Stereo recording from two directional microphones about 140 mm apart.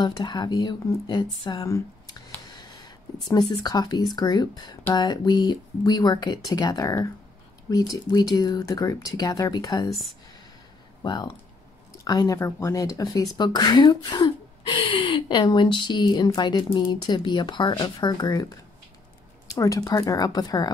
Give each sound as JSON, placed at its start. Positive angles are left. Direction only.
{"t": 0.0, "sound": "speech", "side_deg": 30}
{"t": 9.8, "sound": "speech", "side_deg": 0}
{"t": 11.0, "sound": "speech", "side_deg": 30}
{"t": 19.6, "sound": "speech", "side_deg": 25}